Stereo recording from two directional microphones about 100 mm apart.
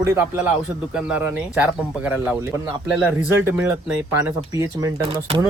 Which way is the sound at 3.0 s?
25° right (ahead or behind).